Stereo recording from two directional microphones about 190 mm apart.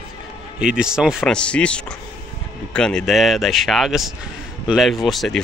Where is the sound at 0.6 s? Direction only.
5° right (ahead or behind).